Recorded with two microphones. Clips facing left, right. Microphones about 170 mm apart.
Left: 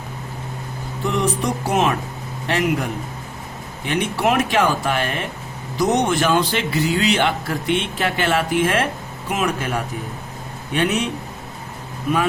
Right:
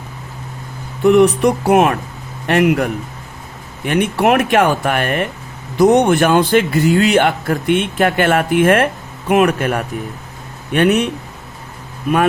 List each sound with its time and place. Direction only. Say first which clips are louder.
1.0 s speech: right 11 dB; 65° right (ahead or behind)
3.8 s speech: right 6 dB; 55° right (ahead or behind)